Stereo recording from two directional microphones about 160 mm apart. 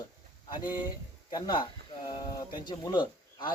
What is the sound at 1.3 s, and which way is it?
Speech, 30° left (ahead or behind).